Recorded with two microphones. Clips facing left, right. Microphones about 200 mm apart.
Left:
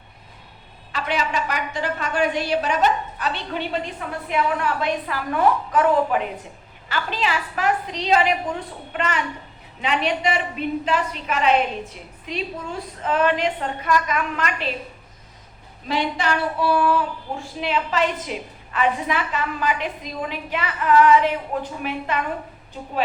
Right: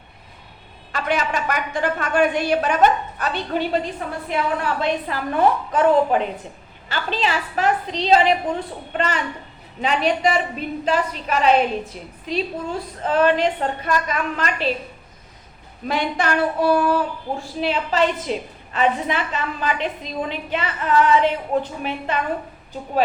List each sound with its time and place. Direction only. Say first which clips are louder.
0.9 s a woman's voice: right 2 dB; 50° right (ahead or behind); by 14.7 s 35° right (ahead or behind)
15.9 s speech: right 1 dB; 50° right (ahead or behind); by 22.2 s 30° right (ahead or behind)